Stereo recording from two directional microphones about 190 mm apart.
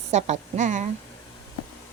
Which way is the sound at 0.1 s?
35° right (ahead or behind).